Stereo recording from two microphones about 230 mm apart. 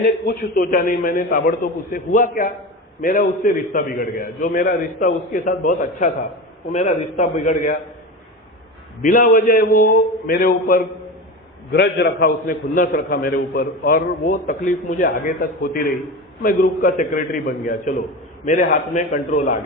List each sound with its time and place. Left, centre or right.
0.0 s a man's voice: left
9.0 s a man's voice: left